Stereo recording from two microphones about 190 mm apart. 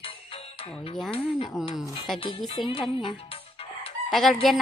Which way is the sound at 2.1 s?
Centre (ahead or behind).